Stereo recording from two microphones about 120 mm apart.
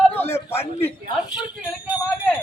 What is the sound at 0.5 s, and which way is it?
Speech, 60° left (ahead or behind).